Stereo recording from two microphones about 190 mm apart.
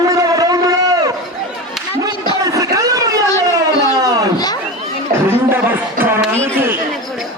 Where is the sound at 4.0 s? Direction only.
20° right (ahead or behind).